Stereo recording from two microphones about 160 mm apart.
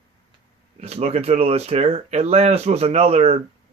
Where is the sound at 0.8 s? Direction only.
40° right (ahead or behind).